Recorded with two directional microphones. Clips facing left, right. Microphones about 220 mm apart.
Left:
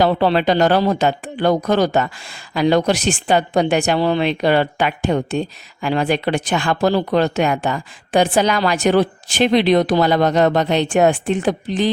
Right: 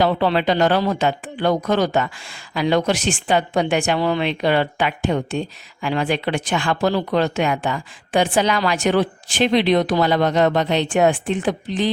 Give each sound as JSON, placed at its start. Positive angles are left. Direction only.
{"t": 0.0, "sound": "speech", "side_deg": 40}